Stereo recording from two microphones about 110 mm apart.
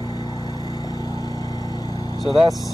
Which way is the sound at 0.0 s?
40° left (ahead or behind).